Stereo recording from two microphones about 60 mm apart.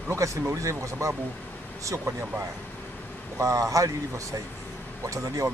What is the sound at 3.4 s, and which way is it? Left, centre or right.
Speech, right.